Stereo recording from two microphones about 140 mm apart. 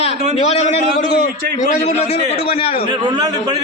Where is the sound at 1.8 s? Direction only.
45° left (ahead or behind).